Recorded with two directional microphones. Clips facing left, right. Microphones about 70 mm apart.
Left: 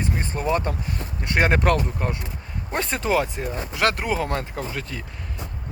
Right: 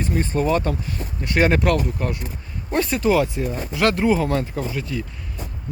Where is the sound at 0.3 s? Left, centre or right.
Centre.